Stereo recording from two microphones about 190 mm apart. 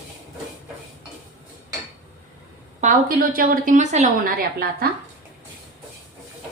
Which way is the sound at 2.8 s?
50° right (ahead or behind).